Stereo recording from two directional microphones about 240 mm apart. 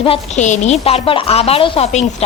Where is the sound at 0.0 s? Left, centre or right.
Left.